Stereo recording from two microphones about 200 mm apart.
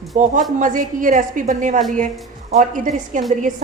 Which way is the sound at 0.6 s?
40° right (ahead or behind).